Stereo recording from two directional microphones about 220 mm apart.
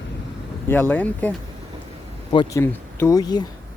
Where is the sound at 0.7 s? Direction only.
10° left (ahead or behind).